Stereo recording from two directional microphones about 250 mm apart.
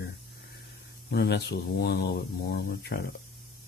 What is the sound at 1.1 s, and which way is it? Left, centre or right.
Speech, left.